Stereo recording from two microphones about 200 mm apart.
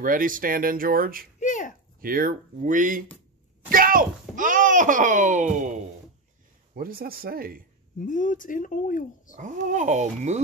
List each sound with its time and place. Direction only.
0.0 s speech: 45° right (ahead or behind)
1.4 s a sound: 40° left (ahead or behind)
2.0 s a child's voice: 45° right (ahead or behind)
8.0 s speech: 40° left (ahead or behind)
9.4 s a child's voice: 40° right (ahead or behind)